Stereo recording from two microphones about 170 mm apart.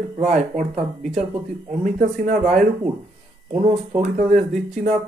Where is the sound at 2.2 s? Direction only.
50° right (ahead or behind).